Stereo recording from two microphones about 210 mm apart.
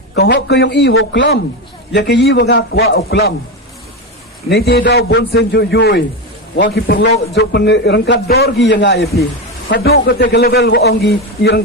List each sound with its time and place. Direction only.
0.2 s a man's voice: 55° left (ahead or behind)
4.4 s a man's voice: 50° left (ahead or behind)